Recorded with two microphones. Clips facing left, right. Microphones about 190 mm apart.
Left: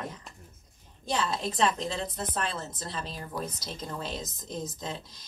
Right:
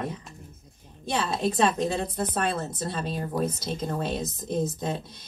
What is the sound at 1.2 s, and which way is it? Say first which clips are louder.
Speech: right 4 dB; 30° right (ahead or behind).